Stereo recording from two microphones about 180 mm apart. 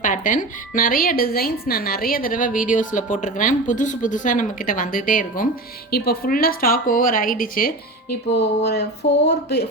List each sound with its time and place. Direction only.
0.0 s speech: 45° left (ahead or behind)
8.4 s speech: 65° left (ahead or behind)